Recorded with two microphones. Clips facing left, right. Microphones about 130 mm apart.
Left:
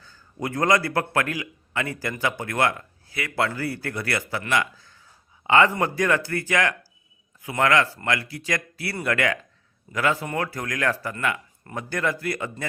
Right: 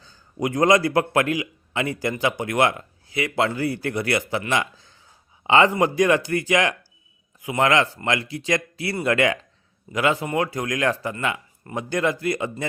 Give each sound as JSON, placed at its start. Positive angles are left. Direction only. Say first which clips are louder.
{"t": 0.0, "sound": "a man's voice", "louder": "right 5 dB", "side_deg": -15}